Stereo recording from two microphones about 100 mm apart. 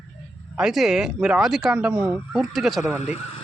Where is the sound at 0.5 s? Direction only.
5° right (ahead or behind).